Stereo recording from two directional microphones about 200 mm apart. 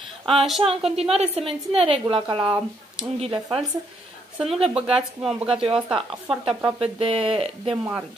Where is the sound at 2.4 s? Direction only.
5° right (ahead or behind).